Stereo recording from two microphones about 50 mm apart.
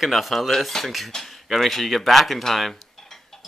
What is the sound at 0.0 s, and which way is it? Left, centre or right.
Dishes, centre.